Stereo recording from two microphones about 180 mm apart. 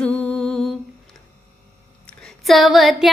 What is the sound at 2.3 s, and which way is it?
Female singing, centre (ahead or behind).